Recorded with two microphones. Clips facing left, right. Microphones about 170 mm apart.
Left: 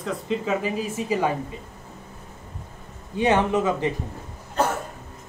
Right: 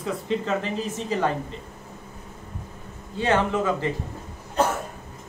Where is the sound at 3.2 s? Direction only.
15° left (ahead or behind).